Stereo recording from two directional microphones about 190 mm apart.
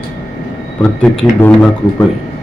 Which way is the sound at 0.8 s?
5° left (ahead or behind).